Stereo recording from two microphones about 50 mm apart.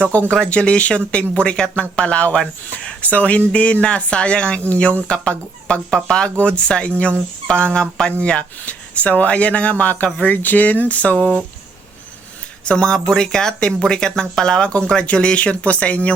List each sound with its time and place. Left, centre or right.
0.0 s speech: left
12.6 s speech: centre